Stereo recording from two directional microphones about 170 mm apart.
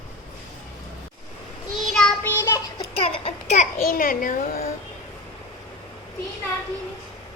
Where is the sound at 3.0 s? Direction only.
40° left (ahead or behind); by 4.7 s 55° left (ahead or behind).